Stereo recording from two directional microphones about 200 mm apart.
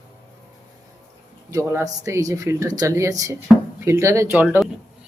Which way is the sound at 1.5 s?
15° right (ahead or behind).